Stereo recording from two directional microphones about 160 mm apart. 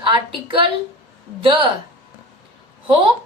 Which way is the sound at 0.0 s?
30° right (ahead or behind).